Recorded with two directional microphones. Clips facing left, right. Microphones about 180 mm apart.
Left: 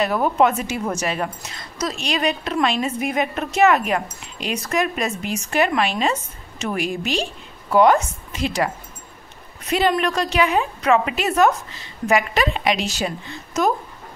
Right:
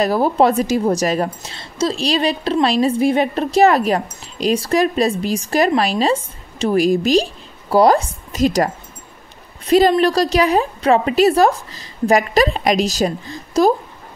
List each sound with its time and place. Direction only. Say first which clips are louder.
0.0 s a woman's voice: right 3 dB; 35° right (ahead or behind)
9.7 s a woman's voice: right 7 dB; 35° right (ahead or behind)